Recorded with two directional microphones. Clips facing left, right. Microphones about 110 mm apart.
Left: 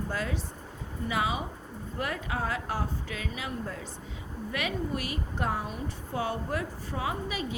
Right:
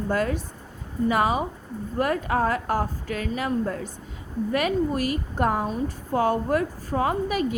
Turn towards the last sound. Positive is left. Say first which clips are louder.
# right 8 dB
turn(degrees=-50)  # may be behind; listen again after turning